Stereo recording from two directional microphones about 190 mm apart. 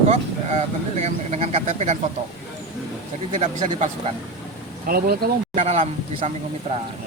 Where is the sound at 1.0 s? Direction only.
35° right (ahead or behind).